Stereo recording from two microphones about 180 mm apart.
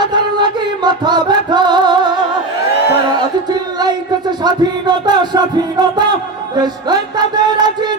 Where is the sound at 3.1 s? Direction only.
25° right (ahead or behind).